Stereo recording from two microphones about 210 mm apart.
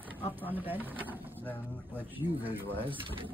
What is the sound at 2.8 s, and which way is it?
Speech, 25° right (ahead or behind).